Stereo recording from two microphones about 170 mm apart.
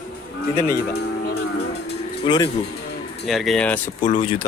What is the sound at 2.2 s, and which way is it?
Speech, 25° left (ahead or behind).